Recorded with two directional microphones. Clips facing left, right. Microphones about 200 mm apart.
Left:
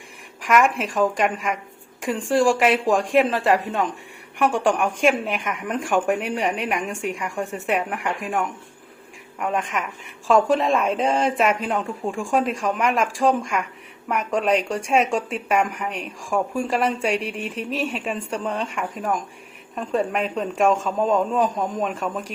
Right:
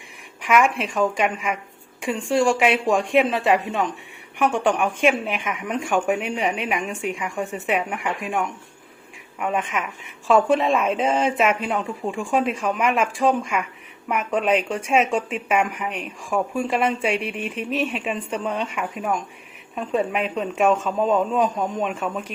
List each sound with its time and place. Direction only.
0.4 s speech: centre (ahead or behind)
17.5 s speech: 35° left (ahead or behind)
17.9 s speech: centre (ahead or behind)